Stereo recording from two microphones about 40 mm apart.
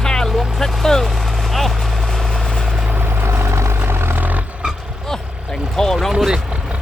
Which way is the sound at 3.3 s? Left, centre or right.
Right.